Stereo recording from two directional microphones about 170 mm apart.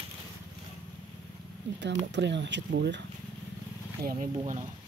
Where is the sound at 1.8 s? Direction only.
90° right.